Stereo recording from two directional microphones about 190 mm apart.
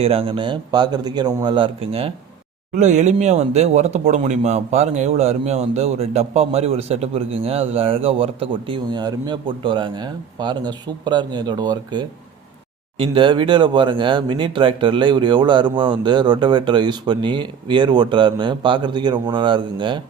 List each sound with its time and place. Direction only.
0.0 s speech: 30° right (ahead or behind)